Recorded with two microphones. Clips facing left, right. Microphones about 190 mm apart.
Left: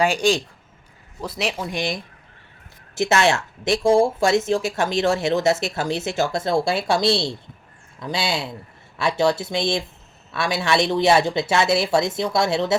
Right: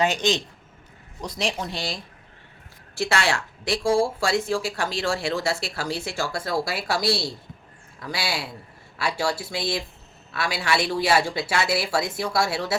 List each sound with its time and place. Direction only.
0.0 s a man's voice: 10° left (ahead or behind)
1.5 s a man's voice: 10° left (ahead or behind)
2.9 s a woman's voice: 20° left (ahead or behind)